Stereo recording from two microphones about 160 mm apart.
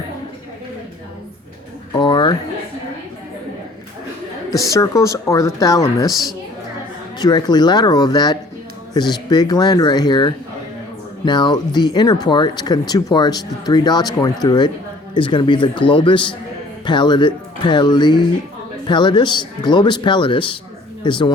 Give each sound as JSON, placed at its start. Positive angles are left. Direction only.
{"t": 2.0, "sound": "a sound", "side_deg": 30}
{"t": 4.7, "sound": "a man's voice", "side_deg": 20}
{"t": 7.2, "sound": "a man's voice", "side_deg": 25}